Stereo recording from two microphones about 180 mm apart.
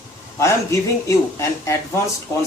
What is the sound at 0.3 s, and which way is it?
Speech, 15° left (ahead or behind).